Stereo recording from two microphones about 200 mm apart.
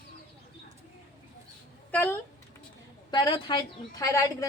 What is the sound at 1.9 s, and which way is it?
Speech, 10° left (ahead or behind).